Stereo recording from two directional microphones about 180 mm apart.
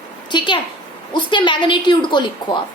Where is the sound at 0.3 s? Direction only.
25° left (ahead or behind).